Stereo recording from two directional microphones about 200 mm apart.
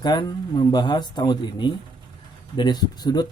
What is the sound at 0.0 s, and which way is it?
Speech, 20° left (ahead or behind).